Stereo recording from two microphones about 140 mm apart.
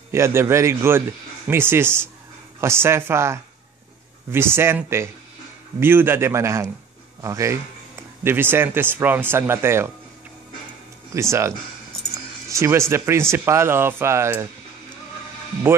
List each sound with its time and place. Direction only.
0.1 s a man's voice: 20° right (ahead or behind)
11.1 s speech: 20° right (ahead or behind)